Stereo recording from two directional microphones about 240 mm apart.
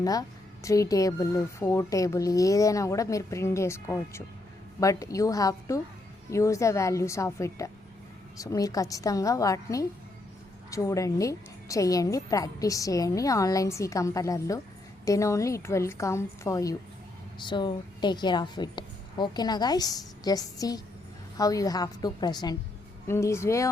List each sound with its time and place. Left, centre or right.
0.0 s a woman's voice: centre